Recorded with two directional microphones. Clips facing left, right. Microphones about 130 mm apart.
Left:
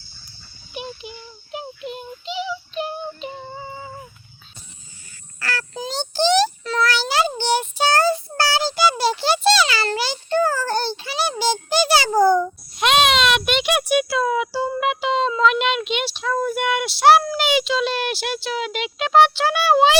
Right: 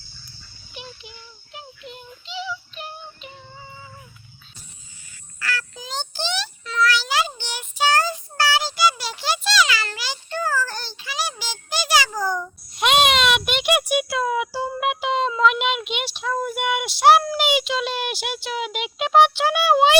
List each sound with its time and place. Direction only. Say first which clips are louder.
0.7 s music: left 8 dB; 15° left (ahead or behind)
3.3 s music: left 9 dB; 60° left (ahead or behind)
5.4 s child singing: left 3 dB; 35° left (ahead or behind)
12.8 s music: left 1 dB; 10° right (ahead or behind)